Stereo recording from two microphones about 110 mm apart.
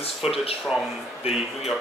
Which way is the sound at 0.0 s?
60° left (ahead or behind).